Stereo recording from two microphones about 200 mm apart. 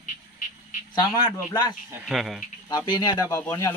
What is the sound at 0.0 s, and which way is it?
Frog, 40° left (ahead or behind).